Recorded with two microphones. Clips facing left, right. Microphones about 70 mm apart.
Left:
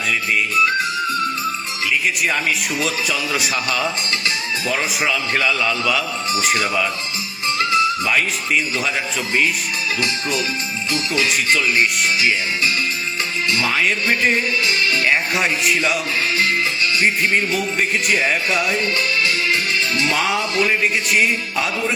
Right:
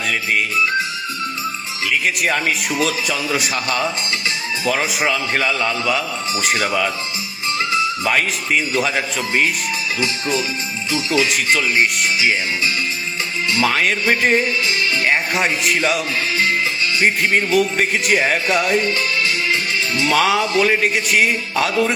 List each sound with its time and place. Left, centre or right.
1.9 s speech: right
2.8 s music: right
3.5 s a man's voice: right
5.0 s a man's voice: right
6.5 s music: right
8.0 s music: right
13.7 s music: right
15.0 s music: right
15.7 s music: right
17.0 s music: right
20.1 s music: right
20.6 s music: right